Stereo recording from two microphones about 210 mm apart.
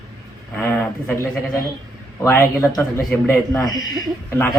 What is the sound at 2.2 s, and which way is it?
Speech, 10° left (ahead or behind).